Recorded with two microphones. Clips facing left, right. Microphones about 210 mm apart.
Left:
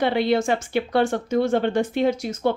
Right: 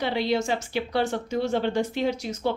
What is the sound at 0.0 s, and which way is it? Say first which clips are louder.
A woman's voice: left 5 dB; 55° left (ahead or behind).